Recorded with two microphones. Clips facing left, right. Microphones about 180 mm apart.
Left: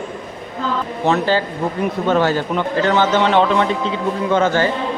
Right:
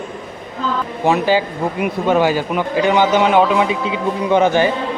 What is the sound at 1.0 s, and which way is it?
A man's voice, 10° right (ahead or behind).